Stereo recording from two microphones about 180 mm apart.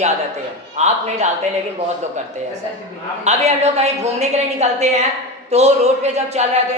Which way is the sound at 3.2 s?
35° right (ahead or behind).